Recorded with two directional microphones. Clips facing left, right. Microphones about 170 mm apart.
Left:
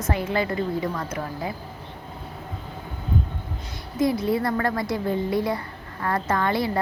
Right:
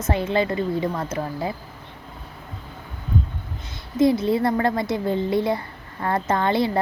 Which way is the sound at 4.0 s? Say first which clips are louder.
Right 4 dB; 25° right (ahead or behind).